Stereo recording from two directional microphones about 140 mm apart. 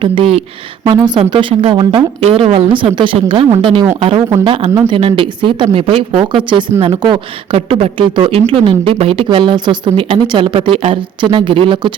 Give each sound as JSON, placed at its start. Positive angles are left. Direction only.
{"t": 0.0, "sound": "speech", "side_deg": -40}